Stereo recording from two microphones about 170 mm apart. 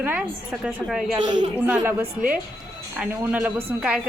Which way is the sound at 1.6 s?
10° right (ahead or behind).